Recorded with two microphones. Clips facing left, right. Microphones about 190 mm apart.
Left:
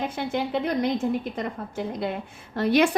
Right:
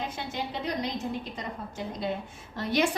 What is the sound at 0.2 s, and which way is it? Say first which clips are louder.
A woman's voice: left 8 dB; 55° left (ahead or behind).